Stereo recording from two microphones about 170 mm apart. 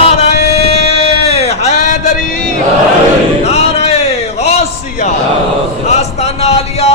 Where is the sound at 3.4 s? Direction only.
35° left (ahead or behind).